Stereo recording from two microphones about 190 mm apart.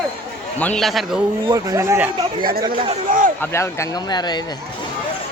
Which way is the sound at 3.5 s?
15° left (ahead or behind).